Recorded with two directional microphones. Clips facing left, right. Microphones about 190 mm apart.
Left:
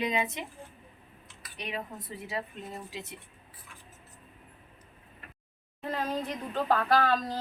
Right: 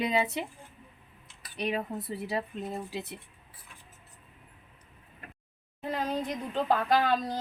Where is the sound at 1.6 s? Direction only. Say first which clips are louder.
Right 6 dB; 35° right (ahead or behind).